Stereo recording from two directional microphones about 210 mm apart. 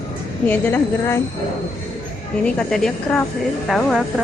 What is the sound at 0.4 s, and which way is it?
Speech, 10° left (ahead or behind).